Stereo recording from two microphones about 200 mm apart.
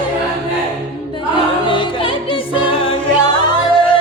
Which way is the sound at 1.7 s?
25° left (ahead or behind).